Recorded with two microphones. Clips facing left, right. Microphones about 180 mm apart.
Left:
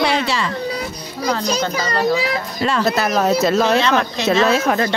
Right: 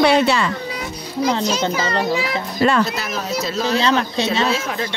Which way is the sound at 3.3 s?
55° left (ahead or behind).